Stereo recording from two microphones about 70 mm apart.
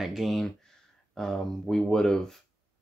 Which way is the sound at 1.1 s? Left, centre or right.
Centre.